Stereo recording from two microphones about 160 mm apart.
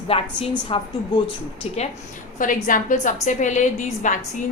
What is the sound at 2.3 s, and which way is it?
A woman's voice, 55° left (ahead or behind).